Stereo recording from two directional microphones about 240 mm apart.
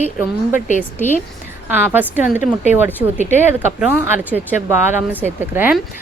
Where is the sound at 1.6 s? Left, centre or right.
Centre.